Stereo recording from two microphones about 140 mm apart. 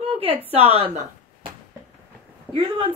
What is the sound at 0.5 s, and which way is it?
Speech, 45° right (ahead or behind).